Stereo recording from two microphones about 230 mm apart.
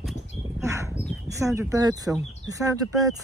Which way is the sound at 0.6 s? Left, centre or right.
Centre.